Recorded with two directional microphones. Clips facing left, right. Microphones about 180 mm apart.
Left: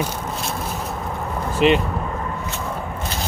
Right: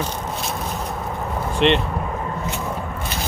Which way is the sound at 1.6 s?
5° left (ahead or behind).